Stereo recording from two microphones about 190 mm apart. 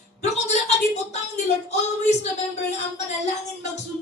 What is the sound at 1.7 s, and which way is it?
Speech, 35° left (ahead or behind).